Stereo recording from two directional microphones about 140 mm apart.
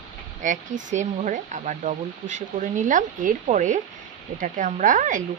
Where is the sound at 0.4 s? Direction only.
60° right (ahead or behind).